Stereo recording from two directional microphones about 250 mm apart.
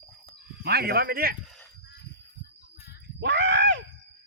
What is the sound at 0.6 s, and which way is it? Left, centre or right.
Speech, right.